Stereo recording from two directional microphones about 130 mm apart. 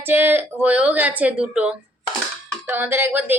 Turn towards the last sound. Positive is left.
turn(degrees=-15)  # may be behind; listen again after turning